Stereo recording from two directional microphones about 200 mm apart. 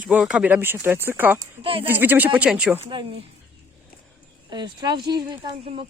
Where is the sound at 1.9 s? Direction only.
10° right (ahead or behind).